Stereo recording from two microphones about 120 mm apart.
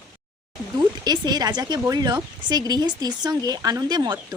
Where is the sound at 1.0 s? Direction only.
35° right (ahead or behind).